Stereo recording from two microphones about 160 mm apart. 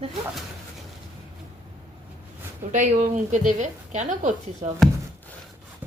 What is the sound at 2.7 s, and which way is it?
Speech, 50° right (ahead or behind).